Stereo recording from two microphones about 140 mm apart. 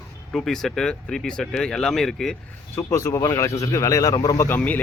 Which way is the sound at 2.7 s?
20° left (ahead or behind).